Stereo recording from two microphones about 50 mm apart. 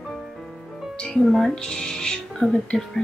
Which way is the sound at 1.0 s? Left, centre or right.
Centre.